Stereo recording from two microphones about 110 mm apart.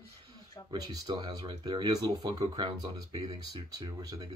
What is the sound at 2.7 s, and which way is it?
Speech, 60° right (ahead or behind).